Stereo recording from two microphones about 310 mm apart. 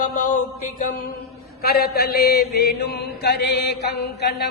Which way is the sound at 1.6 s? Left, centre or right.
Left.